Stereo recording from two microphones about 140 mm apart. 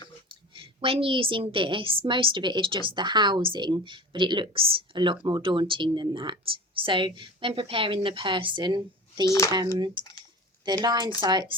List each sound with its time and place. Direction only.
0.5 s speech: 40° right (ahead or behind)
9.2 s speech: 25° left (ahead or behind)
9.7 s speech: 30° right (ahead or behind)